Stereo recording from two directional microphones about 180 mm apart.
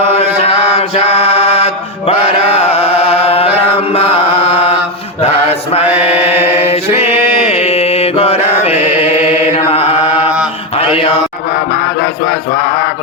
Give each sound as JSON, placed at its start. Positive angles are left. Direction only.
{"t": 0.4, "sound": "mantra", "side_deg": 35}
{"t": 3.8, "sound": "chant", "side_deg": 35}
{"t": 5.2, "sound": "mantra", "side_deg": 35}
{"t": 9.6, "sound": "mantra", "side_deg": 35}